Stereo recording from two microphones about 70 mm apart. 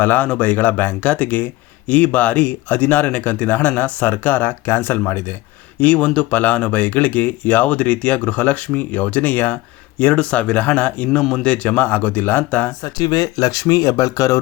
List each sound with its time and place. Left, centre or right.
0.0 s speech: left
5.8 s speech: left
12.8 s speech: left